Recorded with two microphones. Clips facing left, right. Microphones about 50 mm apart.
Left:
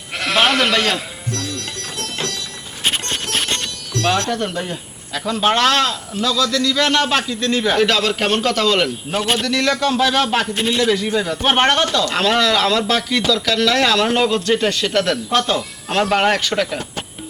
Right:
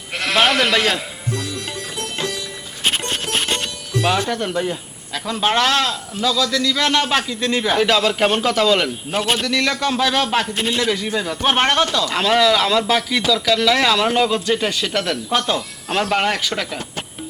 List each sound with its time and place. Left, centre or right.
0.1 s sheep: centre
3.0 s music: centre
5.1 s a man's voice: centre
11.4 s speech: centre
11.7 s speech: centre